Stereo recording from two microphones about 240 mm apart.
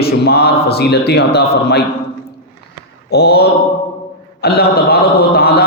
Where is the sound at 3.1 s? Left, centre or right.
Left.